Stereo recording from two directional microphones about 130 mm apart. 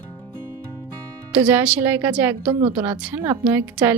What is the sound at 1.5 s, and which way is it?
A woman's voice, 10° right (ahead or behind).